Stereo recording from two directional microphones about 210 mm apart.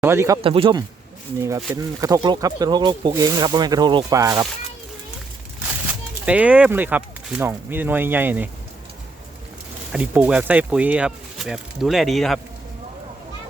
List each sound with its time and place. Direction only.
0.0 s speech: 10° right (ahead or behind)
0.4 s speech: 25° right (ahead or behind)
6.2 s speech: 5° right (ahead or behind)
9.9 s speech: 5° right (ahead or behind)